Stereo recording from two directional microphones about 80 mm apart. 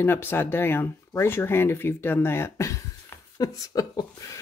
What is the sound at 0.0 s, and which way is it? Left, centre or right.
Speech, left.